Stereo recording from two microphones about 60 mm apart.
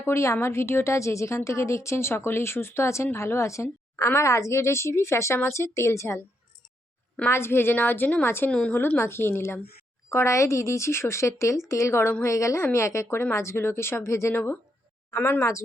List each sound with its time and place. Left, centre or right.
0.0 s a woman's voice: left
7.3 s a woman's voice: left
8.4 s a woman's voice: centre
8.7 s a woman's voice: left
10.1 s a woman's voice: left
14.3 s a woman's voice: left